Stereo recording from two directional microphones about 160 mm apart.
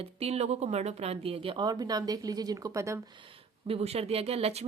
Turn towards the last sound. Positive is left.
turn(degrees=-40)  # may be behind; listen again after turning